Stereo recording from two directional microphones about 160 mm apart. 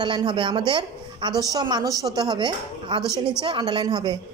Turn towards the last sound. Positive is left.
turn(degrees=-25)  # may be behind; listen again after turning